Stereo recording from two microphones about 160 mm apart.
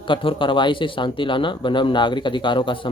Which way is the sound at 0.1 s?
30° left (ahead or behind).